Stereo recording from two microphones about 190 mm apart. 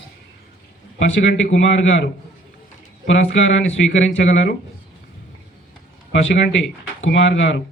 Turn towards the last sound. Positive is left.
turn(degrees=75)  # may be behind; listen again after turning